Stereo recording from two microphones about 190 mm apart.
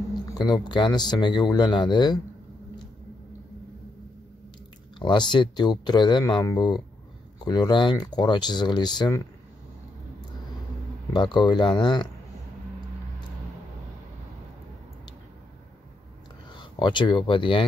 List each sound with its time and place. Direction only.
0.2 s speech: 20° left (ahead or behind)
4.9 s speech: 25° left (ahead or behind)
11.1 s speech: 25° left (ahead or behind)
16.5 s speech: 25° left (ahead or behind)